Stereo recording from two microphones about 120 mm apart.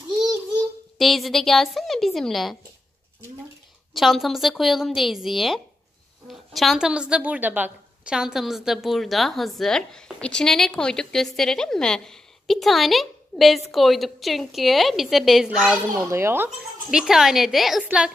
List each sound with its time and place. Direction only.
0.9 s a woman's voice: centre (ahead or behind)
3.9 s a woman's voice: centre (ahead or behind)
16.1 s speech: 20° right (ahead or behind)
16.4 s a woman's voice: 5° right (ahead or behind)